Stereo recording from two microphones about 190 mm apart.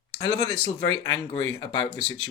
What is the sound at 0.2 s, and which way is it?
Speech, 15° left (ahead or behind).